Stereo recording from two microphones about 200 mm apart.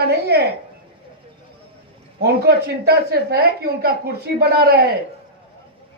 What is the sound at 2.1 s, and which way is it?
A woman's voice, 55° right (ahead or behind).